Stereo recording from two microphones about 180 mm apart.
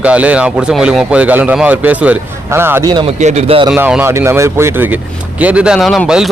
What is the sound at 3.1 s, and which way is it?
Speech, 40° right (ahead or behind).